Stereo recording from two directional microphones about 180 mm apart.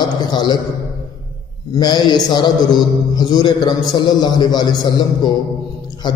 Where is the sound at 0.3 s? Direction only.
25° left (ahead or behind).